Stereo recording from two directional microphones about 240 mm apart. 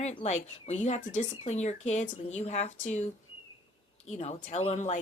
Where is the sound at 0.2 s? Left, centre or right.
Left.